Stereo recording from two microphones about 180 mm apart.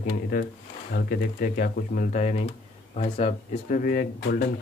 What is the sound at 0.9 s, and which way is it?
Speech, 60° left (ahead or behind).